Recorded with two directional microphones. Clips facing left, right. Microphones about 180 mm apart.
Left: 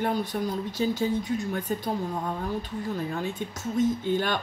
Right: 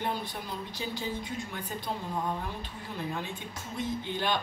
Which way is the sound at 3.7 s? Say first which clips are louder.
Left 9 dB; 45° left (ahead or behind).